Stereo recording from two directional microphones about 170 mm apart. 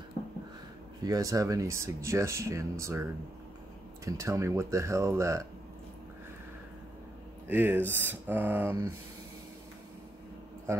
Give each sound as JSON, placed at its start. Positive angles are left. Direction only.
{"t": 1.0, "sound": "speech", "side_deg": -20}
{"t": 7.4, "sound": "speech", "side_deg": -10}
{"t": 10.7, "sound": "speech", "side_deg": -15}